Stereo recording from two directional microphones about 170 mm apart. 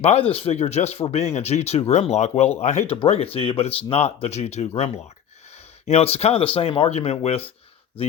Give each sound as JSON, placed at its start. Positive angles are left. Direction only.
{"t": 0.0, "sound": "speech", "side_deg": 35}